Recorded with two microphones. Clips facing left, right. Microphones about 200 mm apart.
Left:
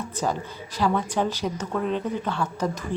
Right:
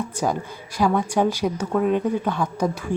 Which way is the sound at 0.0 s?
10° right (ahead or behind).